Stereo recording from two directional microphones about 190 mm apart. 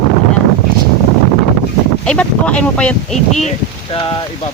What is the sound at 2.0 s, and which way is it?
Speech, 5° left (ahead or behind).